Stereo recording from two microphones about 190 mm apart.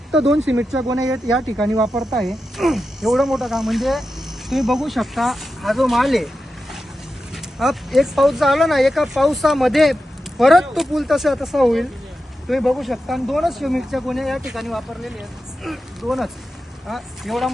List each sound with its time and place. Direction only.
0.1 s speech: centre (ahead or behind)
0.9 s speech: 20° right (ahead or behind)
1.1 s speech: centre (ahead or behind)
7.6 s speech: centre (ahead or behind)